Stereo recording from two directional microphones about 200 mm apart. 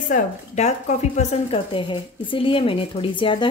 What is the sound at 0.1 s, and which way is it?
A woman's voice, 35° left (ahead or behind).